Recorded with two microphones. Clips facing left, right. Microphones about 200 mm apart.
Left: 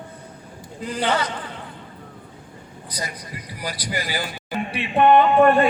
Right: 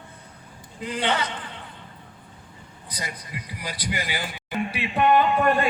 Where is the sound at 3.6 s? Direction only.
35° left (ahead or behind).